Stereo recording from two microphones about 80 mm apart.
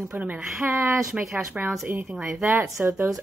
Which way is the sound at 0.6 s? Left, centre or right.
Right.